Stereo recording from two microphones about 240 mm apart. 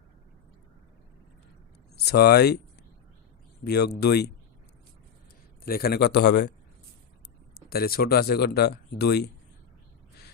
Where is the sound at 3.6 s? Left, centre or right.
Left.